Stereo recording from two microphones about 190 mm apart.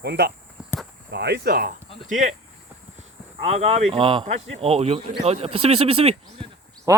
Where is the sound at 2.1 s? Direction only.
40° right (ahead or behind).